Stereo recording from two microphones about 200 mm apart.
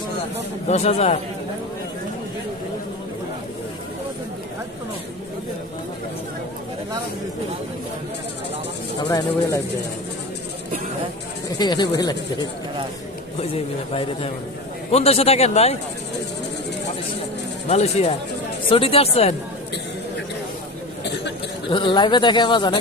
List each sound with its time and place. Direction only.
0.7 s a man's voice: 30° left (ahead or behind)
9.0 s speech: 20° left (ahead or behind)
11.4 s speech: 20° left (ahead or behind)
14.9 s a man's voice: 30° left (ahead or behind)
17.7 s a man's voice: 35° left (ahead or behind)
21.0 s a sound: 60° left (ahead or behind)
21.7 s speech: 25° left (ahead or behind)